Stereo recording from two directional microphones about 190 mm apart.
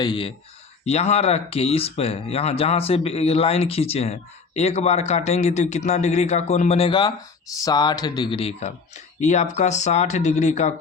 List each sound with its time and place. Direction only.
0.0 s speech: 25° left (ahead or behind)